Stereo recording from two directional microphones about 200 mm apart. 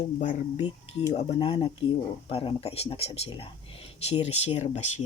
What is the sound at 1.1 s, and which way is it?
Speech, 30° left (ahead or behind).